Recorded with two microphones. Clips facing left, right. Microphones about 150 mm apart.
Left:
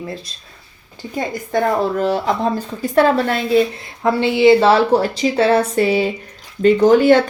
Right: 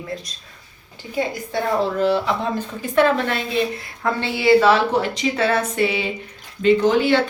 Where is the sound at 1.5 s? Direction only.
45° left (ahead or behind).